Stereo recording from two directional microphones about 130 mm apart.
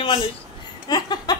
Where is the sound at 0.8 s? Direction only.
30° left (ahead or behind).